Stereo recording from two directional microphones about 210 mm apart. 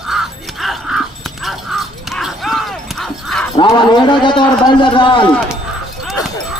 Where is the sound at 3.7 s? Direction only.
20° left (ahead or behind).